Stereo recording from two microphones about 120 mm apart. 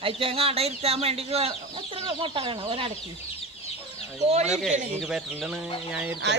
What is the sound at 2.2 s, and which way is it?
Speech, 45° right (ahead or behind).